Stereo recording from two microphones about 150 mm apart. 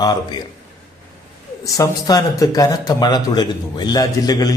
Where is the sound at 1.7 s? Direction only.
20° left (ahead or behind).